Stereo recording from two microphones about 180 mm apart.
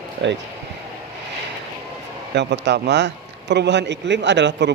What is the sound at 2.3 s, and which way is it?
A man's voice, 75° right (ahead or behind).